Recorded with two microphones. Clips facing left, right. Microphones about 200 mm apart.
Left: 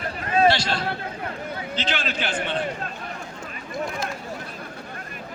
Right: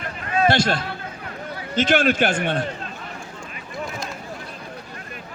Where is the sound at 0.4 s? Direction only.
50° right (ahead or behind).